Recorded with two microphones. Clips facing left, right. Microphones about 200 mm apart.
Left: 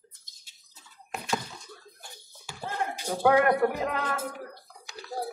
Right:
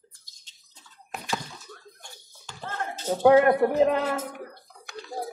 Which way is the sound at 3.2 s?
25° right (ahead or behind).